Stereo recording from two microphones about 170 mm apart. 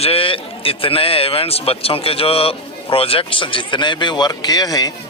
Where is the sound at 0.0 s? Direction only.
35° left (ahead or behind).